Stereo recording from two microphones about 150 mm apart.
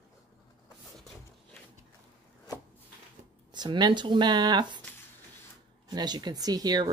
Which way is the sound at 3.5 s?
30° right (ahead or behind).